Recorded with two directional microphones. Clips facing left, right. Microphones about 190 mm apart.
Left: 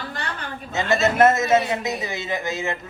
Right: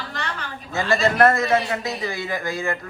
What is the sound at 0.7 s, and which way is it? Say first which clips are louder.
A man's voice: even; 20° left (ahead or behind).